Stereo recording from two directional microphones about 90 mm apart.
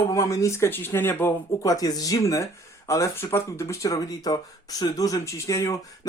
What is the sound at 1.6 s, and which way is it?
Speech, 40° left (ahead or behind).